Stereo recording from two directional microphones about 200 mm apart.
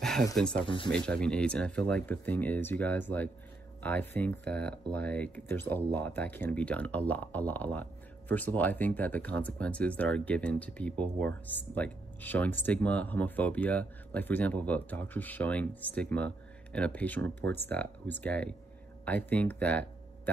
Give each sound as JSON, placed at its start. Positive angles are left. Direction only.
{"t": 0.4, "sound": "speech", "side_deg": 5}
{"t": 17.4, "sound": "speech", "side_deg": -55}
{"t": 17.6, "sound": "speech", "side_deg": 10}